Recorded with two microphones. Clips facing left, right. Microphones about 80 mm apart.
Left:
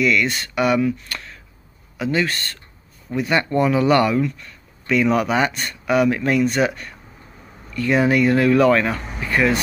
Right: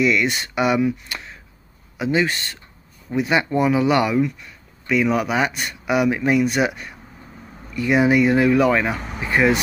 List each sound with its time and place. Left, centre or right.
0.0 s speech: centre